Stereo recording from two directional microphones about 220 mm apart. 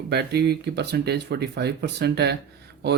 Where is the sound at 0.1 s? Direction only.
50° right (ahead or behind).